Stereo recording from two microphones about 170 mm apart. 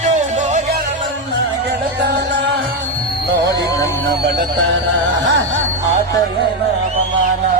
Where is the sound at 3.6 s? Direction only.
20° left (ahead or behind).